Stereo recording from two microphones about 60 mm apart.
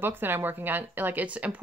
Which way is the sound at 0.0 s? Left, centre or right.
Right.